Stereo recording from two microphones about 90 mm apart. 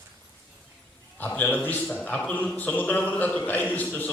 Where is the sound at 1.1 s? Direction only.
20° left (ahead or behind).